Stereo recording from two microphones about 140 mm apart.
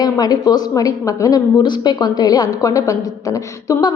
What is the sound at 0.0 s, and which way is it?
A woman's voice, 30° left (ahead or behind).